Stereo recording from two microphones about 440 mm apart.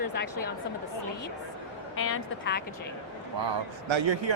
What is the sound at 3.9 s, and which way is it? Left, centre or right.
Speech, right.